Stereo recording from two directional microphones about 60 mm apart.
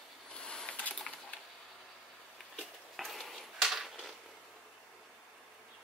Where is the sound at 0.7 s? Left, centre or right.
Left.